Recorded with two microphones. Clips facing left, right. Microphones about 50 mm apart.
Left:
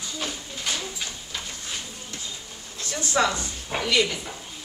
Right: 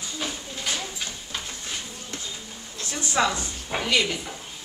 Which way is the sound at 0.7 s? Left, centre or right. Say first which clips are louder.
Even; centre.